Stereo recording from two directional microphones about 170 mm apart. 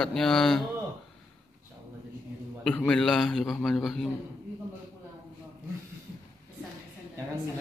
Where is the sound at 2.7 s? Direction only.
5° left (ahead or behind).